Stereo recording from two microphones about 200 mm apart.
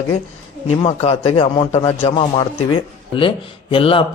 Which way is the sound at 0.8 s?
30° left (ahead or behind).